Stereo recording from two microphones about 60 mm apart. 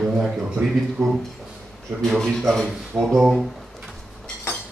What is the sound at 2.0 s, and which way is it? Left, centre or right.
Speech, centre.